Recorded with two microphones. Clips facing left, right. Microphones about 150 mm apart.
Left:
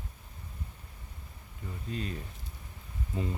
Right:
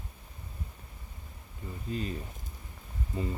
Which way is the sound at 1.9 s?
Centre (ahead or behind).